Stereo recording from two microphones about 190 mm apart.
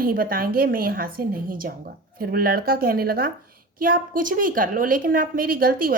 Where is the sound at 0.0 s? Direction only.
50° right (ahead or behind).